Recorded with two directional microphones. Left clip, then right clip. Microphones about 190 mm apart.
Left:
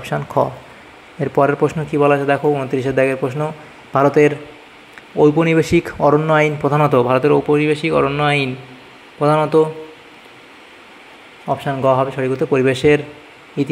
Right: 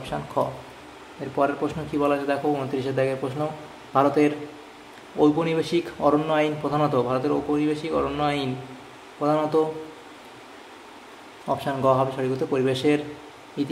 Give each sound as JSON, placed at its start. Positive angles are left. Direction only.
{"t": 0.0, "sound": "a man's voice", "side_deg": 30}
{"t": 11.4, "sound": "a man's voice", "side_deg": 20}